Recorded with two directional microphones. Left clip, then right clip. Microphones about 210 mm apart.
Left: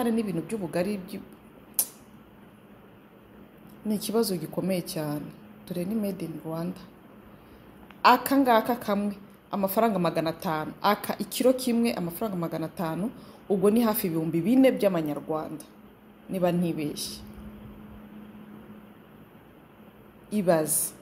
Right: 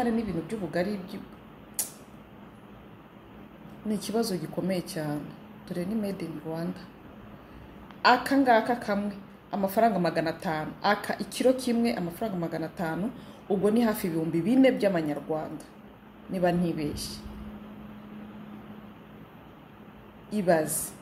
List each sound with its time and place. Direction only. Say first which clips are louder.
0.0 s a woman's voice: left 1 dB; 40° left (ahead or behind)
3.8 s a woman's voice: left 3 dB; 35° left (ahead or behind)
8.0 s a woman's voice: left 2 dB; 35° left (ahead or behind)
20.2 s a woman's voice: left 1 dB; 35° left (ahead or behind)